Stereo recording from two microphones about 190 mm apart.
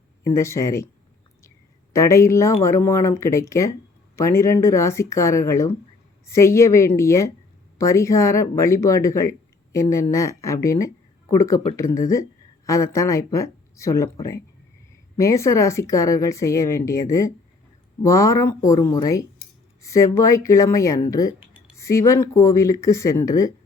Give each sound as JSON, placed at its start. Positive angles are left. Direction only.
{"t": 0.3, "sound": "speech", "side_deg": 15}